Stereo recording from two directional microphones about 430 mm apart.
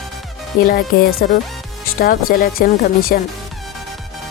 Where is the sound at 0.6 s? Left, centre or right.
Centre.